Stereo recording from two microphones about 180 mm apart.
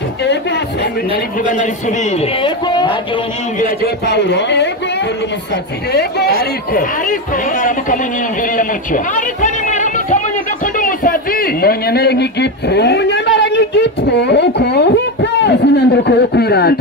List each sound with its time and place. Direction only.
1.5 s a man's voice: 45° left (ahead or behind)
2.4 s a sound: 25° left (ahead or behind)
3.5 s a man's voice: 45° left (ahead or behind)
4.1 s a man's voice: 75° left (ahead or behind)
5.9 s a man's voice: 65° left (ahead or behind)
6.7 s a man's voice: 50° left (ahead or behind)
8.5 s a sound: 45° left (ahead or behind)
10.8 s a man's voice: 50° left (ahead or behind)